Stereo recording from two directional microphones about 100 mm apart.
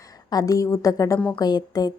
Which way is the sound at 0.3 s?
40° left (ahead or behind).